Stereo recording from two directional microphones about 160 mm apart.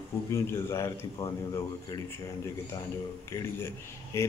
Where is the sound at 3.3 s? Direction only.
15° left (ahead or behind).